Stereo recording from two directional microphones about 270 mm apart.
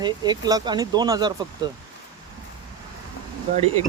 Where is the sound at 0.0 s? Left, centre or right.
Centre.